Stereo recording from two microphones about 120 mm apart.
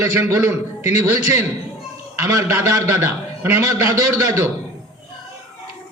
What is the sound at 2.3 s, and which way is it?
A man's voice, 20° right (ahead or behind).